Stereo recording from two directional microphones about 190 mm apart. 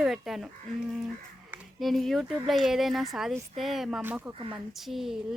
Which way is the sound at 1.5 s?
Centre (ahead or behind).